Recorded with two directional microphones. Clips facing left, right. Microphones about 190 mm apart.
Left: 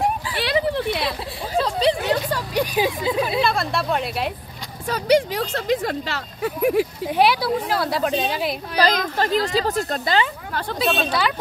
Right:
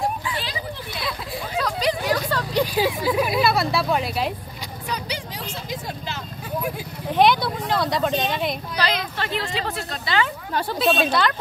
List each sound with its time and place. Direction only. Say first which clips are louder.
0.4 s a sound: left 10 dB; 70° left (ahead or behind)
1.5 s vehicle: left 4 dB; 30° left (ahead or behind)
3.3 s speech: right 1 dB; 5° right (ahead or behind)
4.8 s speech: left 13 dB; 55° left (ahead or behind)
7.1 s speech: right 4 dB; 5° left (ahead or behind)
8.8 s speech: left 6 dB; 45° left (ahead or behind)
10.7 s speech: right 1 dB; 5° right (ahead or behind)
11.1 s a woman's voice: right 1 dB; 10° left (ahead or behind)